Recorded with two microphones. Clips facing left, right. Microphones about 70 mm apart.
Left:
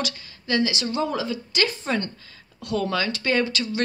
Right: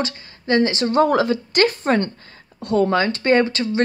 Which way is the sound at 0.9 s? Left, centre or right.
Right.